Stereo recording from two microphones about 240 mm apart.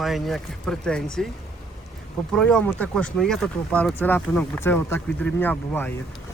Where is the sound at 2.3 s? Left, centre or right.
Centre.